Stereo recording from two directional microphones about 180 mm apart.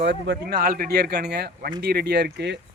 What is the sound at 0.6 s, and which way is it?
Speech, 55° right (ahead or behind).